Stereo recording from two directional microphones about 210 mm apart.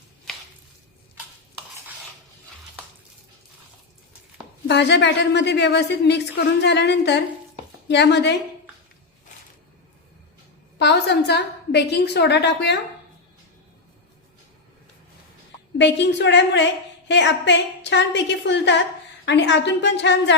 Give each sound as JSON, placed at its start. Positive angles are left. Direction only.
{"t": 4.7, "sound": "a woman's voice", "side_deg": 55}
{"t": 10.8, "sound": "a woman's voice", "side_deg": 55}
{"t": 15.8, "sound": "a woman's voice", "side_deg": 55}